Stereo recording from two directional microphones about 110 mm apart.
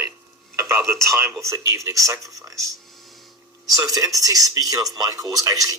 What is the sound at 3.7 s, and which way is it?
Speech, 35° right (ahead or behind).